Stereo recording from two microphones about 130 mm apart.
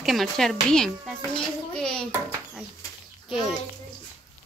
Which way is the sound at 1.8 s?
5° left (ahead or behind).